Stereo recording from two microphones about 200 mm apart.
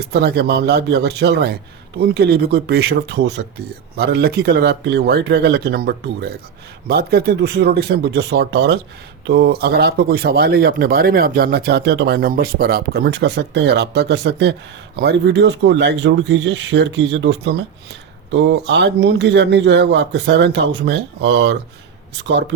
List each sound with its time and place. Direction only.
0.0 s speech: 55° right (ahead or behind)